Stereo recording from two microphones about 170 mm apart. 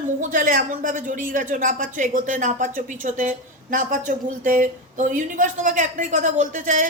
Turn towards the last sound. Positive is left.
turn(degrees=-50)  # may be behind; listen again after turning